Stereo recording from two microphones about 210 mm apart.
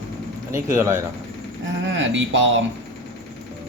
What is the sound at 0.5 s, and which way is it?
Speech, 15° right (ahead or behind).